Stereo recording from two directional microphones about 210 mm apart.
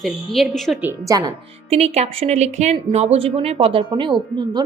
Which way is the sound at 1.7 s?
30° right (ahead or behind).